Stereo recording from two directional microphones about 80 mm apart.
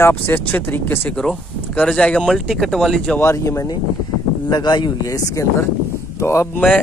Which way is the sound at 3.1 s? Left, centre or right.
Left.